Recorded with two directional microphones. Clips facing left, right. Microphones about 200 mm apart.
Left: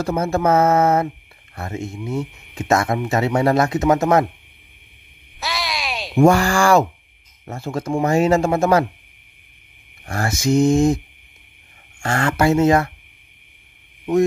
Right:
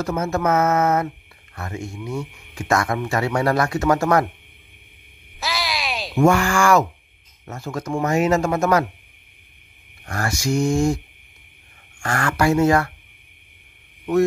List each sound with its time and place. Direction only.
0.0 s mantra: 30° left (ahead or behind)
1.5 s speech: 25° left (ahead or behind)
5.4 s a sound: centre (ahead or behind)
6.1 s mantra: 35° left (ahead or behind)
7.4 s speech: 30° left (ahead or behind)
10.0 s speech: 25° left (ahead or behind)
12.0 s speech: 25° left (ahead or behind)